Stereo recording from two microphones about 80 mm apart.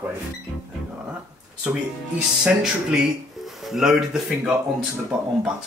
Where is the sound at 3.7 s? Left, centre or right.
Centre.